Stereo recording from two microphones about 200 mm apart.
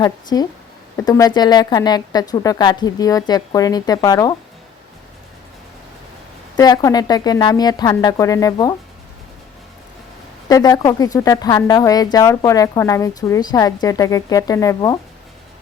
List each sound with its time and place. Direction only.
0.0 s speech: 20° left (ahead or behind)
6.6 s speech: 20° left (ahead or behind)
10.5 s a woman's voice: 15° left (ahead or behind)